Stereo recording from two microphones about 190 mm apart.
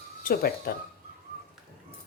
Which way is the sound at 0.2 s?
50° left (ahead or behind).